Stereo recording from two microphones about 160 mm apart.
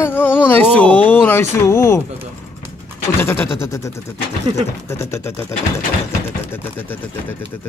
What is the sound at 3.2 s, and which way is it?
Speech, 15° left (ahead or behind).